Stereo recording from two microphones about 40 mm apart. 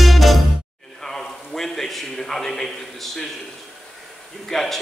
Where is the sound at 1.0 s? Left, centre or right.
Centre.